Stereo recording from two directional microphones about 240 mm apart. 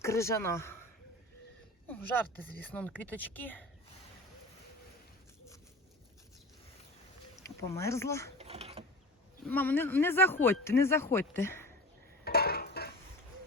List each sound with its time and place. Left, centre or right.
0.0 s a man's voice: centre
1.9 s speech: centre
7.7 s speech: centre
8.4 s mechanisms: right
9.5 s speech: centre
12.2 s dishes: left